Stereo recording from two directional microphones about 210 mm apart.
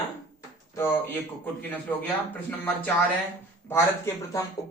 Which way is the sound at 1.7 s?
10° left (ahead or behind).